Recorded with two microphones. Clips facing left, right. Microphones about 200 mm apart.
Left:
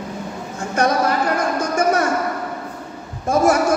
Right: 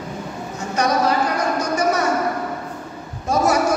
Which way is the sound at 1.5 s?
50° left (ahead or behind).